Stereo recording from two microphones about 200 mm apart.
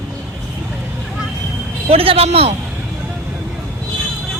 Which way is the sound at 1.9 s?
30° right (ahead or behind).